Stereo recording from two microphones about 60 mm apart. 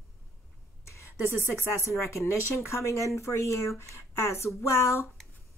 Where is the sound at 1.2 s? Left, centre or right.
Right.